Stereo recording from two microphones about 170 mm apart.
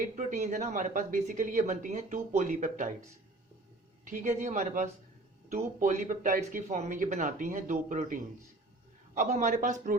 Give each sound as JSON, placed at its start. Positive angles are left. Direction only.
{"t": 0.2, "sound": "speech", "side_deg": -45}
{"t": 4.0, "sound": "speech", "side_deg": -50}